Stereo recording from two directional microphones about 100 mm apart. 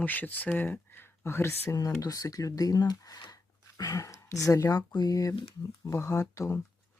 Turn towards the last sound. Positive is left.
turn(degrees=30)  # may be behind; listen again after turning